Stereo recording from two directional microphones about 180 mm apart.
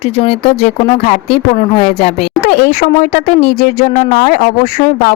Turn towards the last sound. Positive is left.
turn(degrees=45)  # may be behind; listen again after turning